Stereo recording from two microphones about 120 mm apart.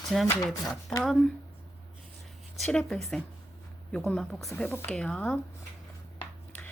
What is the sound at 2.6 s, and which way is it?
Speech, 5° left (ahead or behind).